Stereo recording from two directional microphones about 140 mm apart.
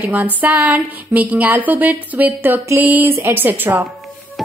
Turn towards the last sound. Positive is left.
turn(degrees=-15)  # may be behind; listen again after turning